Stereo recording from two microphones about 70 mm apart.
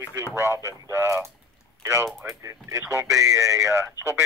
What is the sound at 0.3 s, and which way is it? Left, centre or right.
Speech, right.